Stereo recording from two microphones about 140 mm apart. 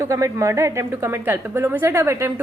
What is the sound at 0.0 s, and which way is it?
A woman's voice, 20° right (ahead or behind).